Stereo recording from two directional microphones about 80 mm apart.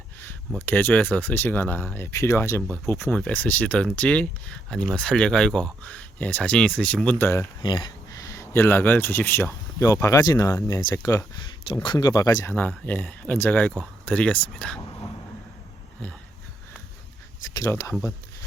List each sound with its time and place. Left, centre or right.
0.6 s speech: left
7.2 s speech: left
7.6 s speech: left
8.1 s speech: left
11.3 s speech: left
11.9 s speech: left
12.5 s speech: left
17.5 s speech: left